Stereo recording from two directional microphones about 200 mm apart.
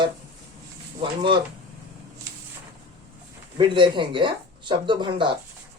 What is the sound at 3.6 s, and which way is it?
Speech, 25° right (ahead or behind).